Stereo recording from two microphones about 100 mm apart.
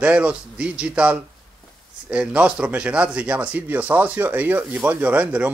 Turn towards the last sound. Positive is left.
turn(degrees=-15)  # may be behind; listen again after turning